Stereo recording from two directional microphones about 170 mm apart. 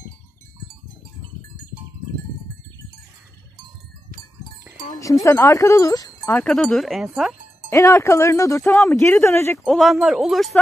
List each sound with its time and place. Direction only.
5.2 s speech: 20° left (ahead or behind)
6.3 s speech: 5° left (ahead or behind)
7.7 s speech: 15° left (ahead or behind)
9.7 s speech: centre (ahead or behind)